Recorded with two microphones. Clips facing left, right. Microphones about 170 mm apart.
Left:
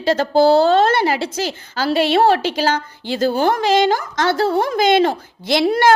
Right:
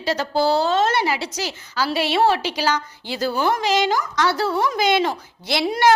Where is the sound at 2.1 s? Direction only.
50° left (ahead or behind).